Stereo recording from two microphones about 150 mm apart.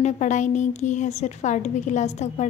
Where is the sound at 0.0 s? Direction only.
55° left (ahead or behind).